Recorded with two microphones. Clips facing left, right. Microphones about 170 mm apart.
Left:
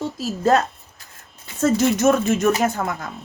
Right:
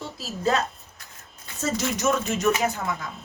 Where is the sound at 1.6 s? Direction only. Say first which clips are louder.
Left 8 dB; 55° left (ahead or behind).